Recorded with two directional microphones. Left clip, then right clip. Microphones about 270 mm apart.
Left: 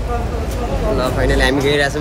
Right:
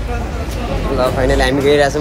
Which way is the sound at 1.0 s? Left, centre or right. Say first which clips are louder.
Right 4 dB; centre.